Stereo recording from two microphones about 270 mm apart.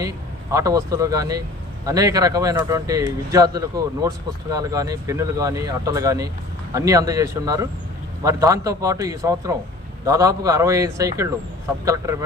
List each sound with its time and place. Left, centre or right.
0.5 s speech: centre